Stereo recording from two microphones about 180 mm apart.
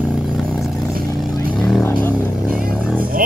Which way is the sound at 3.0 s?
50° right (ahead or behind).